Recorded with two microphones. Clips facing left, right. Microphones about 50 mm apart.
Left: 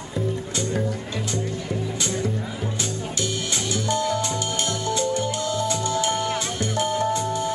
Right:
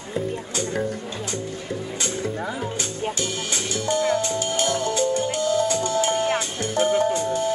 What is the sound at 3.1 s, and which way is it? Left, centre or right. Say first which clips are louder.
Music: left 1 dB; right.